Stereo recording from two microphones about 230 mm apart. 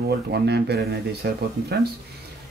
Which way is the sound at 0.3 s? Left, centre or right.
Right.